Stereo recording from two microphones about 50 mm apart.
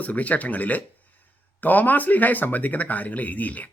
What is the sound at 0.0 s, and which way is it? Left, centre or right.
Speech, left.